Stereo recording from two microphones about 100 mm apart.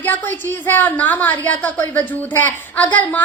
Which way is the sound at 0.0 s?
20° left (ahead or behind).